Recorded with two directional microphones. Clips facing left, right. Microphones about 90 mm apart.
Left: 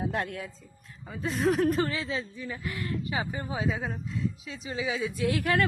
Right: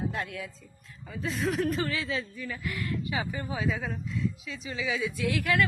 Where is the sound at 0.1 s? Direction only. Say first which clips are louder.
Left 3 dB; 60° left (ahead or behind).